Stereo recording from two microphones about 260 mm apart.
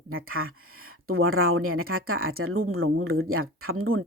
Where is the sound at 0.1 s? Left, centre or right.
Right.